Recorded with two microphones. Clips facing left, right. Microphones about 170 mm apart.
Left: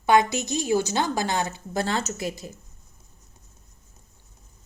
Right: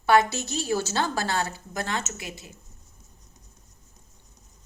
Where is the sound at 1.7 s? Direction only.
35° left (ahead or behind).